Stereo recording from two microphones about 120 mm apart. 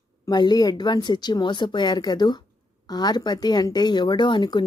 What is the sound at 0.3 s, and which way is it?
Speech, 35° left (ahead or behind).